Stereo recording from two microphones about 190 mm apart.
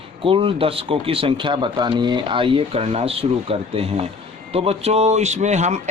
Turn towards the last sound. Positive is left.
turn(degrees=-35)  # may be behind; listen again after turning